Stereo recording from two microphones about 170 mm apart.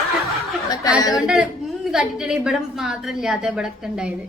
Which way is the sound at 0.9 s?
20° left (ahead or behind).